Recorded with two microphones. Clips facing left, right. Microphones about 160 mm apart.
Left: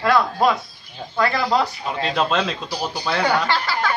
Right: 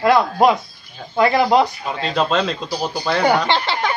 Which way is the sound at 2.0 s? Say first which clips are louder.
Right 2 dB; centre (ahead or behind).